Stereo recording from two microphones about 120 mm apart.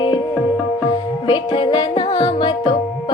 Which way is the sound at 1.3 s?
40° left (ahead or behind).